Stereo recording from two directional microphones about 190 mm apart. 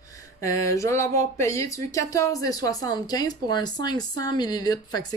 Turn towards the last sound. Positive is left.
turn(degrees=20)  # may be behind; listen again after turning